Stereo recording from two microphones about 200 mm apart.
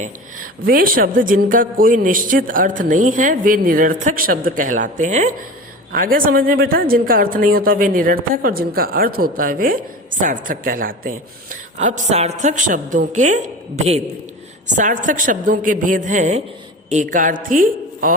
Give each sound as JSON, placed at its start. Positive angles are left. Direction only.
{"t": 0.0, "sound": "a woman's voice", "side_deg": -45}